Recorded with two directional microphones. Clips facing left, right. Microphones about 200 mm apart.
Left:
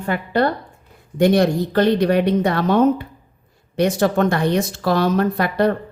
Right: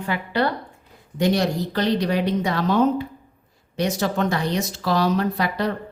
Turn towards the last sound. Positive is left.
turn(degrees=55)  # may be behind; listen again after turning